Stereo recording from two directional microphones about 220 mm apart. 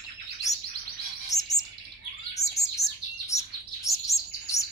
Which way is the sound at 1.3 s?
15° left (ahead or behind).